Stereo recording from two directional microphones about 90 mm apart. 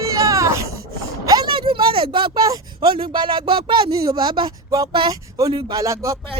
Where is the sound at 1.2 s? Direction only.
45° right (ahead or behind).